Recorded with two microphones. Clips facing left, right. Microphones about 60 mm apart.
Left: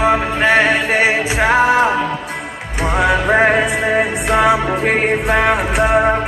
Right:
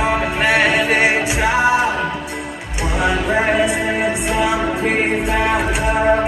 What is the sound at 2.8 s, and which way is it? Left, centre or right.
Music, left.